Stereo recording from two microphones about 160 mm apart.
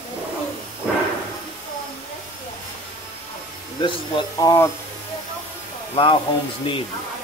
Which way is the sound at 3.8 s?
25° left (ahead or behind).